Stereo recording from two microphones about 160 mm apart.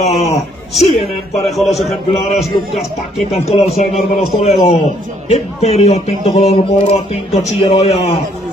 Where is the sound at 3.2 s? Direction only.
40° left (ahead or behind).